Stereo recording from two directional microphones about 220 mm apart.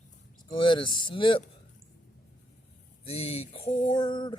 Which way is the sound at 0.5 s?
20° left (ahead or behind).